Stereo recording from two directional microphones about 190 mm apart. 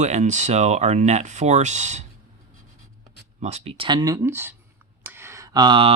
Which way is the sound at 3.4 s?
35° right (ahead or behind).